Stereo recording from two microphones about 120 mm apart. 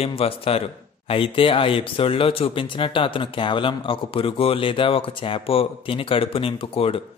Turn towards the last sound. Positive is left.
turn(degrees=50)  # may be behind; listen again after turning